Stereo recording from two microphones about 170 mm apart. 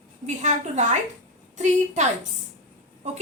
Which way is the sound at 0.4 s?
45° right (ahead or behind).